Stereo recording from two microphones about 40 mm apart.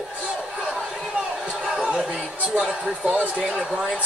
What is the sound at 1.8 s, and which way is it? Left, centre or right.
Chatter, right.